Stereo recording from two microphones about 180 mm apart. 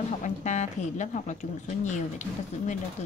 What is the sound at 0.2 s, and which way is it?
A woman's voice, 40° left (ahead or behind).